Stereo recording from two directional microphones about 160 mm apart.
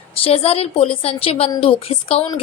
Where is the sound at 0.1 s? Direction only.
35° left (ahead or behind).